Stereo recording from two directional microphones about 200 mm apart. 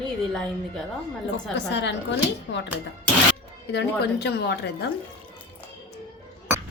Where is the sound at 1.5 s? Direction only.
60° left (ahead or behind).